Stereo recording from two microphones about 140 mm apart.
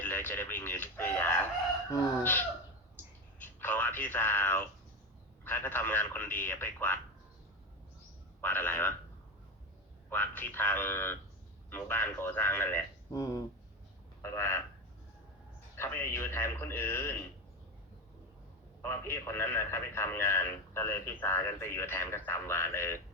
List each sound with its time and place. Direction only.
0.0 s a man's voice: 15° left (ahead or behind)
3.3 s a sound: 15° left (ahead or behind)
5.5 s a man's voice: 15° left (ahead or behind)
8.4 s a man's voice: 15° left (ahead or behind)
10.1 s a man's voice: 15° left (ahead or behind)
15.7 s a man's voice: 20° left (ahead or behind)
18.8 s a man's voice: 15° left (ahead or behind)